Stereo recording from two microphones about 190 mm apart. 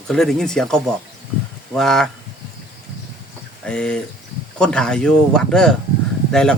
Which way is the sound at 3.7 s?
5° left (ahead or behind).